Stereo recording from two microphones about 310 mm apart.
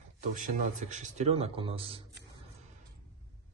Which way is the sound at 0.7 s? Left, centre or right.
Right.